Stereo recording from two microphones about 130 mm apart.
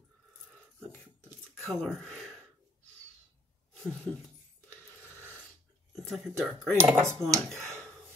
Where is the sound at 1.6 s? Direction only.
Centre (ahead or behind).